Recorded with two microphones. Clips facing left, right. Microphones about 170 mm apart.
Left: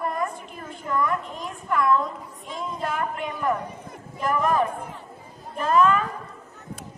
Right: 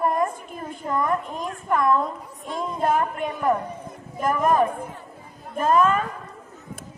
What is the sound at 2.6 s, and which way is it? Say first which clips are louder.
A woman's voice: right 6 dB; 50° right (ahead or behind).